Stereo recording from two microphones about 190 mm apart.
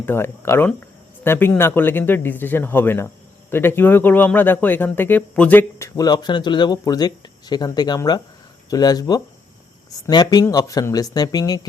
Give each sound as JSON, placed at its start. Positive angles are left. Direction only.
{"t": 0.0, "sound": "speech", "side_deg": 10}